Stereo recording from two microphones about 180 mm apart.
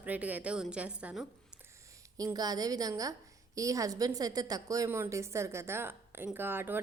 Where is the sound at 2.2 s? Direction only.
20° right (ahead or behind).